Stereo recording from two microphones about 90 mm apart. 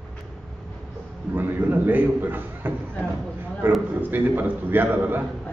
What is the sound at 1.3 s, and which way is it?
A man's voice, 20° right (ahead or behind).